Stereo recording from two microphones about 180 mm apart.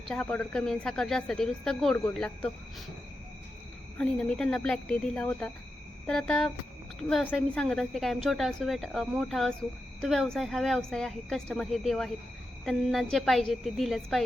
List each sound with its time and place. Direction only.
0.1 s a woman's voice: 5° left (ahead or behind)
3.9 s a woman's voice: 5° left (ahead or behind)